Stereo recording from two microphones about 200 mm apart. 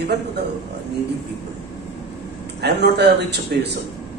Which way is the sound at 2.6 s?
55° right (ahead or behind).